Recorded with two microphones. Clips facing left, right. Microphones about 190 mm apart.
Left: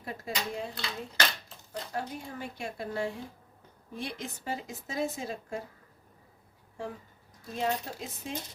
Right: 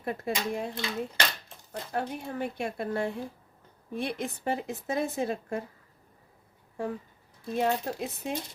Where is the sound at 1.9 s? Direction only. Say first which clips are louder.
Right 6 dB; 60° right (ahead or behind).